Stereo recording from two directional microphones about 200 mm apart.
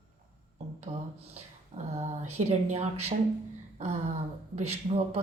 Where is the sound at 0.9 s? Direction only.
30° right (ahead or behind).